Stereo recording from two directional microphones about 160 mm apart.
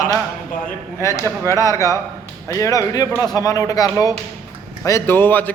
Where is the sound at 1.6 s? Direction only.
20° left (ahead or behind).